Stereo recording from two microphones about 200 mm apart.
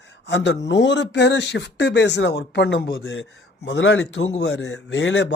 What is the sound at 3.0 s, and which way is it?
A man's voice, 70° left (ahead or behind).